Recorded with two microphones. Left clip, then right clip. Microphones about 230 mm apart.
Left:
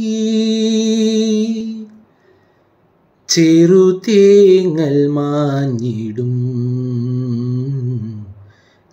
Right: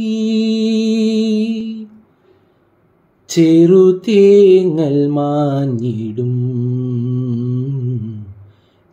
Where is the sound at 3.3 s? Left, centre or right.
Centre.